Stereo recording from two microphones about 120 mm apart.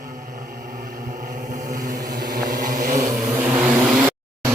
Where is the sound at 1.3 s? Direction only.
90° right.